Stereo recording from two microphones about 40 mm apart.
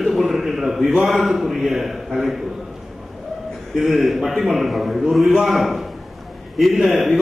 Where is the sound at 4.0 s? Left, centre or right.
Centre.